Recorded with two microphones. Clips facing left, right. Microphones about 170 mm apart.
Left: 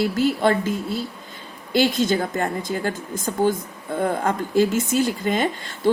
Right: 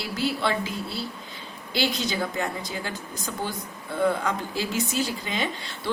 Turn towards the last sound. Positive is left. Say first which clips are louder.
# left 9 dB
turn(degrees=50)  # may be behind; listen again after turning